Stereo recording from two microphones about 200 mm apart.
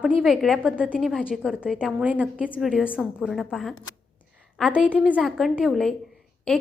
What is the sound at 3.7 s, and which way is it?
Speech, 90° left.